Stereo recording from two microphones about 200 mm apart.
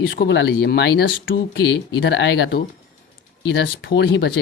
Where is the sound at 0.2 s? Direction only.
60° left (ahead or behind).